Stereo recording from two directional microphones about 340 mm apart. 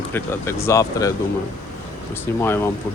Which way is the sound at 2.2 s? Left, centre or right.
Centre.